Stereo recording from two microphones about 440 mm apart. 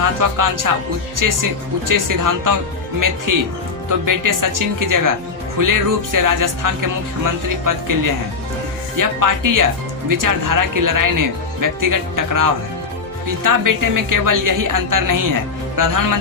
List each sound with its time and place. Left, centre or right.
0.0 s a woman's voice: right